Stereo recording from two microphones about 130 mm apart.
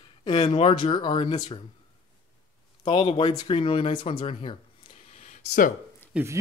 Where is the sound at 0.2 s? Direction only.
40° left (ahead or behind).